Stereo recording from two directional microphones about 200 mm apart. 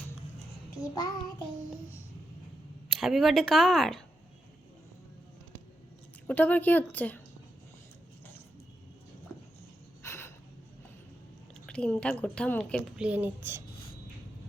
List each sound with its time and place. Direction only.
0.8 s child singing: 20° left (ahead or behind)
2.9 s a woman's voice: centre (ahead or behind)
6.2 s speech: 10° left (ahead or behind)
10.0 s a sound: 15° left (ahead or behind)
11.6 s a woman's voice: 5° left (ahead or behind)
13.1 s speech: 10° right (ahead or behind)